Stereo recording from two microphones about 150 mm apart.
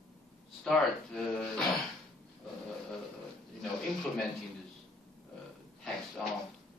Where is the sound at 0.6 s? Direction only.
5° left (ahead or behind).